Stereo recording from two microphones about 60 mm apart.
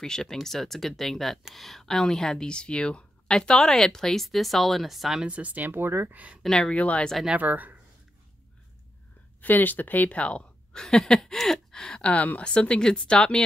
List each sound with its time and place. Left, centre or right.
0.0 s speech: centre
5.2 s speech: right
5.7 s speech: right
6.4 s speech: centre
6.7 s speech: left
7.3 s speech: right
9.4 s a woman's voice: left
10.8 s speech: centre
12.1 s speech: left